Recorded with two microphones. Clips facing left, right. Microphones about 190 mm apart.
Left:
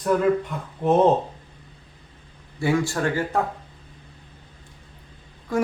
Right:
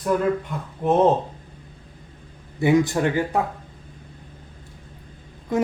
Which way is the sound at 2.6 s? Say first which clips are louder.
Right 4 dB; 20° right (ahead or behind).